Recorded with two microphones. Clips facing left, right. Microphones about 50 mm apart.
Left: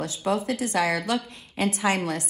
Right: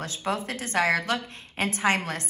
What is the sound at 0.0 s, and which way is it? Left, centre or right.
A woman's voice, right.